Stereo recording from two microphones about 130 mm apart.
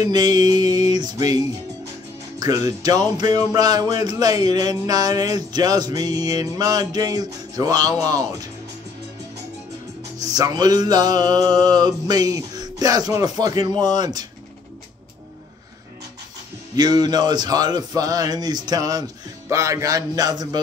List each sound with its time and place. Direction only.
0.0 s speech: 30° right (ahead or behind)
2.4 s speech: 30° right (ahead or behind)
10.2 s speech: 30° right (ahead or behind)
16.7 s speech: 30° right (ahead or behind)